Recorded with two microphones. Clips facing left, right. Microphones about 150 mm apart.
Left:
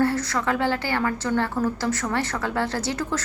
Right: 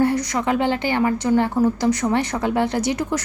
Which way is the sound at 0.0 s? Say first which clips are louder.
Right 3 dB; 15° right (ahead or behind).